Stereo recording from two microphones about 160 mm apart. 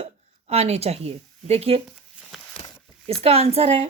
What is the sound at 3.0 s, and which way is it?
Speech, 40° right (ahead or behind).